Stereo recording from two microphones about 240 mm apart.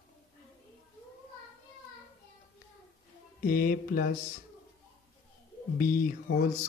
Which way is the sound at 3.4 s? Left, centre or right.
Left.